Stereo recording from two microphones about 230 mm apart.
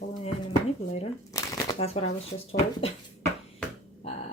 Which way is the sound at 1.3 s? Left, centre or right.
Centre.